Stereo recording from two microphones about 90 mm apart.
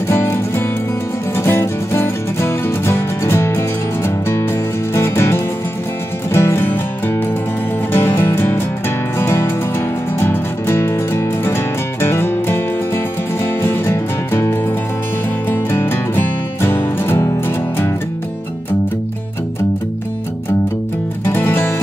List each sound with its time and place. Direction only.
0.1 s music: 25° left (ahead or behind)
21.3 s music: 25° left (ahead or behind)